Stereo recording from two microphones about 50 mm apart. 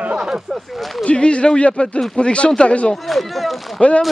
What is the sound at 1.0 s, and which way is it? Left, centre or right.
Speech, left.